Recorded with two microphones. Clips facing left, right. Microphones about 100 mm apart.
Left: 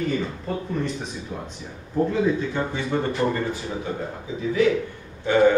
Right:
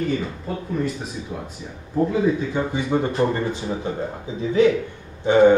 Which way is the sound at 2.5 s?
15° right (ahead or behind).